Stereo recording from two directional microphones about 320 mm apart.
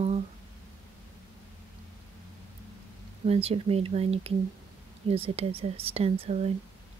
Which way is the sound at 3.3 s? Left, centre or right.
Centre.